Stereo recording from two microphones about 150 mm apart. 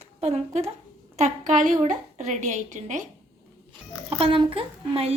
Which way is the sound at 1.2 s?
55° right (ahead or behind).